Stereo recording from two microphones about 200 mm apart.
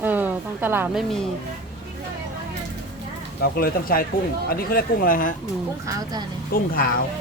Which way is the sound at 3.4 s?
50° left (ahead or behind).